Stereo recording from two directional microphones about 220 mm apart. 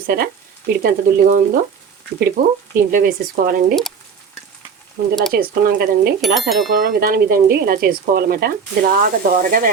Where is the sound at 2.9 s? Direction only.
40° right (ahead or behind).